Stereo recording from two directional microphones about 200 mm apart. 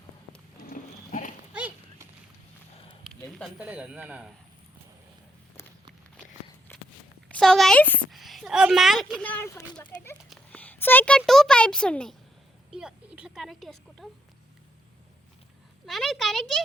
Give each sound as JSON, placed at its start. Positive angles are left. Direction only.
{"t": 0.6, "sound": "sheep", "side_deg": 45}
{"t": 1.5, "sound": "horse", "side_deg": -10}
{"t": 3.1, "sound": "speech", "side_deg": 0}
{"t": 6.7, "sound": "walk", "side_deg": 10}
{"t": 7.3, "sound": "speech", "side_deg": 5}
{"t": 10.2, "sound": "a sound", "side_deg": 5}
{"t": 11.2, "sound": "speech", "side_deg": 0}
{"t": 15.9, "sound": "speech", "side_deg": 0}